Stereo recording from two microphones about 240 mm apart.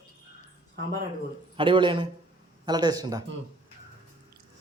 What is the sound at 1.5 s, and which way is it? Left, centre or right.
A man's voice, right.